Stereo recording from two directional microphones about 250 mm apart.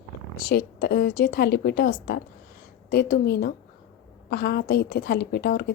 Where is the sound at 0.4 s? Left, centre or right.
Left.